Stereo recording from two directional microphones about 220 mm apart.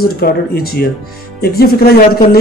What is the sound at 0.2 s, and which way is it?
Speech, 45° left (ahead or behind).